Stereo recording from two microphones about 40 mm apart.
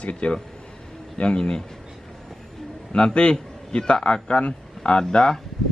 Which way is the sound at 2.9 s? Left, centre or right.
Left.